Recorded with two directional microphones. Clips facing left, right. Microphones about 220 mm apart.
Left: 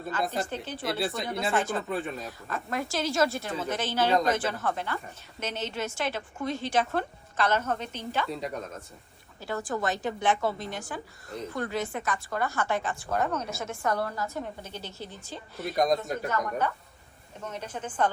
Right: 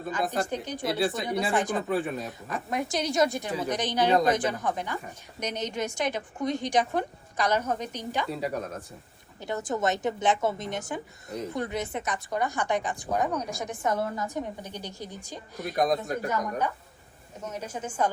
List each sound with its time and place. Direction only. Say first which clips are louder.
0.1 s speech: right 2 dB; 15° right (ahead or behind)
0.8 s speech: right 3 dB; centre (ahead or behind)
1.5 s speech: even; 15° right (ahead or behind)
1.9 s speech: right 4 dB; centre (ahead or behind)
2.5 s speech: right 2 dB; 15° right (ahead or behind)
8.3 s speech: right 3 dB; 5° right (ahead or behind)
9.4 s a woman's voice: right 2 dB; 20° right (ahead or behind)
15.8 s speech: even; centre (ahead or behind)
17.4 s speech: right 1 dB; 10° right (ahead or behind)